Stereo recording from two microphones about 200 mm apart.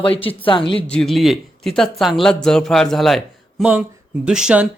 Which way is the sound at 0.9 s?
Centre (ahead or behind).